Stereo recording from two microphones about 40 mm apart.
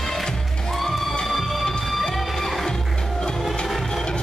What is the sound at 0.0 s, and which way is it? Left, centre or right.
Music, centre.